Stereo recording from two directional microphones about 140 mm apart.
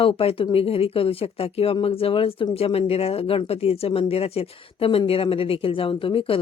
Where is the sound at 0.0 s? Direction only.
40° left (ahead or behind).